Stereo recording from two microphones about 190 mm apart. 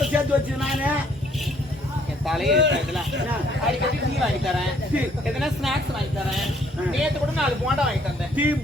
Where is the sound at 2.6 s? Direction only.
65° right (ahead or behind).